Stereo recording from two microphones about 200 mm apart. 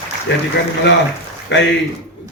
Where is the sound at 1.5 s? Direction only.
60° left (ahead or behind).